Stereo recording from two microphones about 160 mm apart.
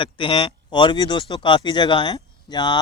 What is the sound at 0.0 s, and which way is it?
Speech, 30° left (ahead or behind).